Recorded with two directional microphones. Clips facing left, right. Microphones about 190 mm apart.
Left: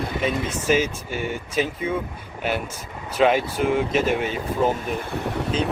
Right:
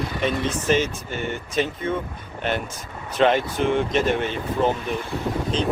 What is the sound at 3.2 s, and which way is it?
Speech, 5° left (ahead or behind).